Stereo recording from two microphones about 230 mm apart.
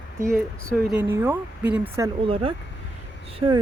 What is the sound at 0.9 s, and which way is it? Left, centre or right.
Speech, centre.